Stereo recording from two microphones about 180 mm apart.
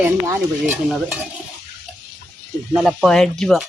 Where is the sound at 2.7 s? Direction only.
Centre (ahead or behind).